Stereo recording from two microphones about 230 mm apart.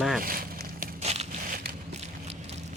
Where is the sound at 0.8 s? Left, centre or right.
Right.